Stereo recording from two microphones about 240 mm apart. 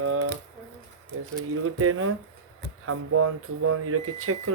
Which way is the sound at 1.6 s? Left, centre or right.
Right.